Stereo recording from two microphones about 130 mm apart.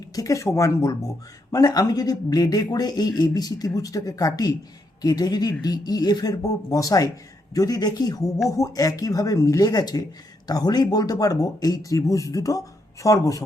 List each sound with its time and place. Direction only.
0.2 s speech: 25° left (ahead or behind)